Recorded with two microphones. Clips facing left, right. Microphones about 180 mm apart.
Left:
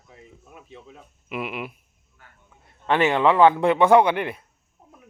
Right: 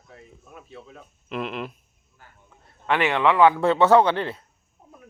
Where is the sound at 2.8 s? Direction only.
25° left (ahead or behind).